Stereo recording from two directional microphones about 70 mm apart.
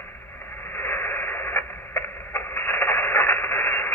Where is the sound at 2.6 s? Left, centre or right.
Left.